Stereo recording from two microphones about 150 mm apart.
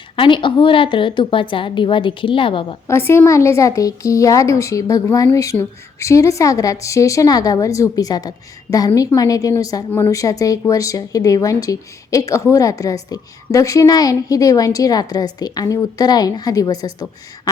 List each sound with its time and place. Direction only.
0.2 s a woman's voice: 35° left (ahead or behind)
3.1 s speech: 20° left (ahead or behind)